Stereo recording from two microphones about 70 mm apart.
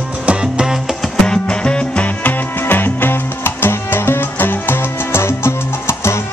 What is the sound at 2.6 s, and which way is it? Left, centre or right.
Music, left.